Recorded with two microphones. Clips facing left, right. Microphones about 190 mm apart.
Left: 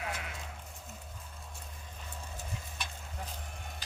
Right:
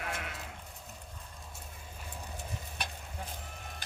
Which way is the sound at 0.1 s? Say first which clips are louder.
Right 1 dB; 55° right (ahead or behind).